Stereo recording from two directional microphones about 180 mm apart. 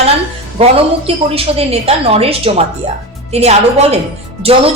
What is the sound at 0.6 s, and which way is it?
A woman's voice, 35° right (ahead or behind).